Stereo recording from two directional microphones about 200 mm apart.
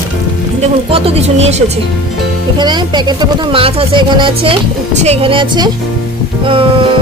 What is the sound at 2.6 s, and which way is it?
Speech, 20° right (ahead or behind).